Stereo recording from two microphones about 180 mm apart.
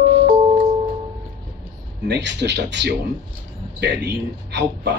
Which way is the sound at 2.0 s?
70° right (ahead or behind).